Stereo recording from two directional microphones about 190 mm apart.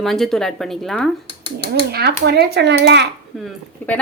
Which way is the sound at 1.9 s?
60° right (ahead or behind).